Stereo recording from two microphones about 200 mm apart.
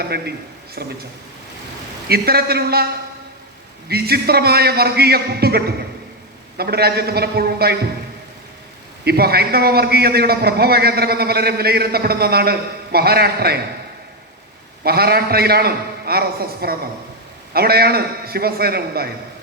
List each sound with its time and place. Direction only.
0.0 s a man's voice: 55° right (ahead or behind)
2.0 s a man's voice: 50° right (ahead or behind)
9.0 s a man's voice: 50° right (ahead or behind)
14.8 s a man's voice: 50° right (ahead or behind)